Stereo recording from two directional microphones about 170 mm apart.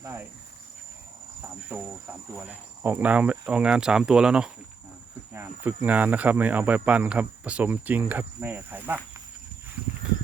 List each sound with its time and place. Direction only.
0.0 s insect: 15° right (ahead or behind)
1.7 s speech: 15° right (ahead or behind)